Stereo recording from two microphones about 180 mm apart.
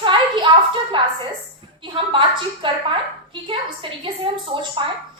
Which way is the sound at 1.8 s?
30° right (ahead or behind).